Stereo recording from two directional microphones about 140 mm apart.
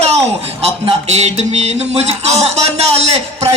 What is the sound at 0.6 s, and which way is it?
Speech, 50° right (ahead or behind).